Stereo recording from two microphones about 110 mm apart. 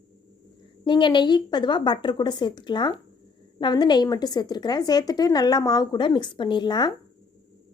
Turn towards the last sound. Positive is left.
turn(degrees=40)  # may be behind; listen again after turning